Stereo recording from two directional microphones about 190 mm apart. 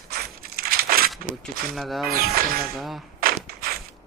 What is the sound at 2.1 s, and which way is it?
Speech, 50° right (ahead or behind).